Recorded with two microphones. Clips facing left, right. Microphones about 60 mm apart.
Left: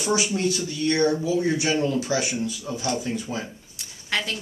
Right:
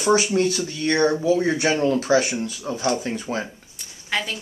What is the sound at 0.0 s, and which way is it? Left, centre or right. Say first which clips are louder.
Speech: right 5 dB; right.